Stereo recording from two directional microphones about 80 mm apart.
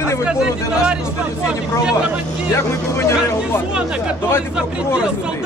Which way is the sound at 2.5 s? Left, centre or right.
Left.